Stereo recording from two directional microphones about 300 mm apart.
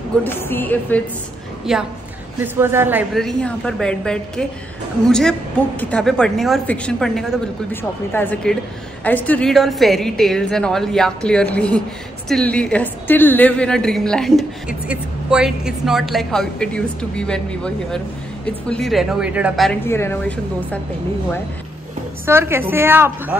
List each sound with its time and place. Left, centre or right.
0.2 s a woman's voice: centre
22.2 s a woman's voice: centre